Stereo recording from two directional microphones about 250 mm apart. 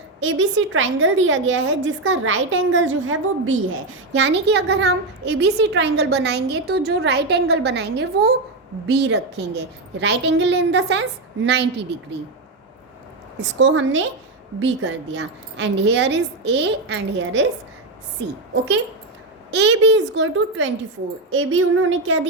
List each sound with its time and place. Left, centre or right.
0.2 s a woman's voice: right
13.4 s a woman's voice: right
18.5 s a woman's voice: right